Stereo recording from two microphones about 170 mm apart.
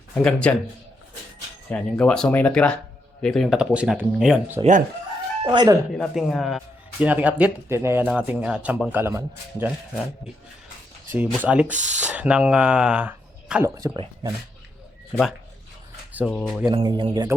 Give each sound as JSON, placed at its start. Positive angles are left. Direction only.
{"t": 0.1, "sound": "speech", "side_deg": 5}
{"t": 1.7, "sound": "speech", "side_deg": 5}
{"t": 5.4, "sound": "speech", "side_deg": -25}
{"t": 6.0, "sound": "a man's voice", "side_deg": 0}
{"t": 11.1, "sound": "a man's voice", "side_deg": -10}
{"t": 13.7, "sound": "speech", "side_deg": -20}
{"t": 15.1, "sound": "speech", "side_deg": 0}
{"t": 16.6, "sound": "speech", "side_deg": -25}